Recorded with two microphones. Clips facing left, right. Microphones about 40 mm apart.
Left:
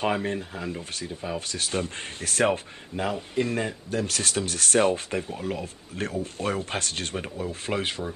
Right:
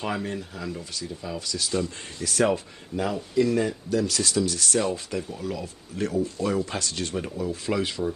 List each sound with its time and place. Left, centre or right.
0.0 s speech: left